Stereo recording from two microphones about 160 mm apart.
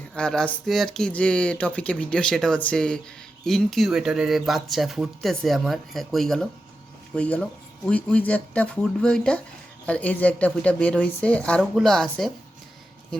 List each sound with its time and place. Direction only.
0.2 s a woman's voice: 5° left (ahead or behind)